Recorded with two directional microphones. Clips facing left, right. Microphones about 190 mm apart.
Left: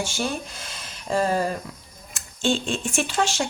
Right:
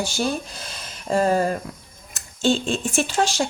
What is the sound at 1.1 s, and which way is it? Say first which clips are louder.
Speech: right 3 dB; 40° right (ahead or behind).